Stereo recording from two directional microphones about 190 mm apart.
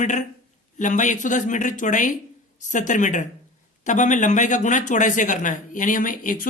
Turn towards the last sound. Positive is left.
turn(degrees=45)  # may be behind; listen again after turning